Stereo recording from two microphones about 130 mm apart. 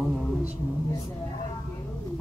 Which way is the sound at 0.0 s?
Centre (ahead or behind).